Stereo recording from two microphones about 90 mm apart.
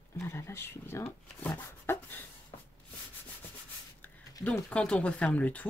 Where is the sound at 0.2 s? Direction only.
25° left (ahead or behind).